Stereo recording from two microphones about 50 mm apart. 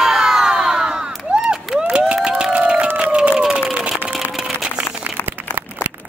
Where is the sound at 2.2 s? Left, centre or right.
Centre.